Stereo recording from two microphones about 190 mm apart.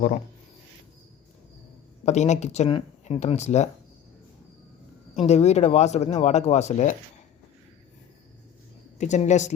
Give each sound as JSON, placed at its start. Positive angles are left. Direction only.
{"t": 2.0, "sound": "speech", "side_deg": 35}
{"t": 5.1, "sound": "speech", "side_deg": 35}
{"t": 9.0, "sound": "speech", "side_deg": 40}